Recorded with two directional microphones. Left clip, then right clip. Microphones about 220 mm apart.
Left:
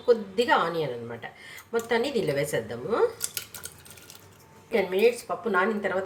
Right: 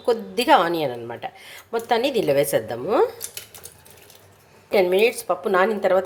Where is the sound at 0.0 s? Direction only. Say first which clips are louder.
Right 1 dB; 40° right (ahead or behind).